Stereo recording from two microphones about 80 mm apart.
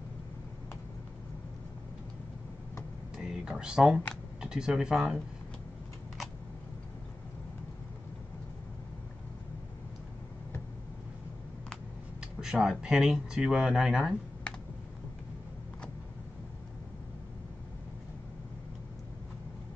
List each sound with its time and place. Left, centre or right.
3.2 s speech: centre
12.4 s speech: centre